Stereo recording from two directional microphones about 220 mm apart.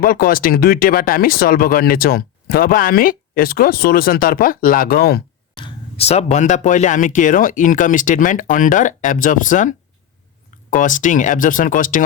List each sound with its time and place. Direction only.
0.0 s speech: 40° left (ahead or behind)
5.5 s speech: 25° left (ahead or behind)